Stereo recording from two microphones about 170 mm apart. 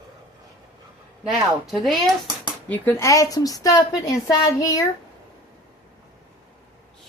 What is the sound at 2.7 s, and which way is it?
A woman's voice, 15° left (ahead or behind).